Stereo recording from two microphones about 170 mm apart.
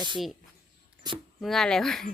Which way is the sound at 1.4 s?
Centre (ahead or behind).